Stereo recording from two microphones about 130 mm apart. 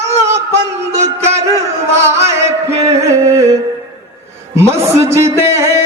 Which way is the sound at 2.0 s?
20° right (ahead or behind).